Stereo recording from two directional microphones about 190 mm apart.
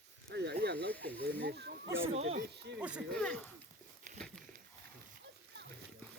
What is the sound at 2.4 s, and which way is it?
Speech, 60° right (ahead or behind).